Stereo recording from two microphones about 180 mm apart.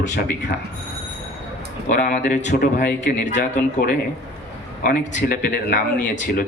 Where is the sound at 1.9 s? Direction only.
45° left (ahead or behind).